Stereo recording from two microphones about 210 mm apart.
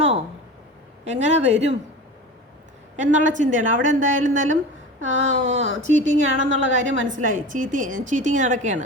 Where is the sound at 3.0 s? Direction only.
35° right (ahead or behind).